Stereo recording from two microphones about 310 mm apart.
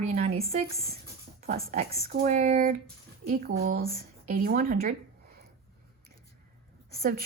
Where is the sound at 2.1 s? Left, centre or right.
Right.